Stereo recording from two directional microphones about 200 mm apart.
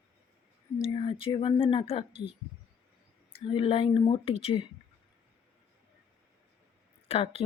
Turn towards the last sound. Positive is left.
turn(degrees=30)  # may be behind; listen again after turning